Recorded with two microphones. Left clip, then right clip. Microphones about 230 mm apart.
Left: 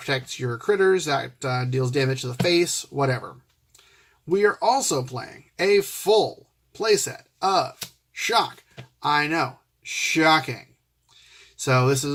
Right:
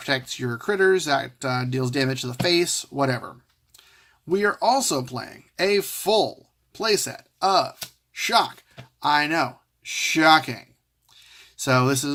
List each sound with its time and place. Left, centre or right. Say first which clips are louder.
0.0 s speech: right 1 dB; right
4.3 s speech: left 1 dB; right
11.3 s a sound: right 1 dB; right